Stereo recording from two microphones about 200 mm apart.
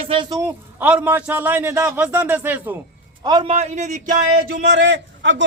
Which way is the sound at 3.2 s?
20° right (ahead or behind).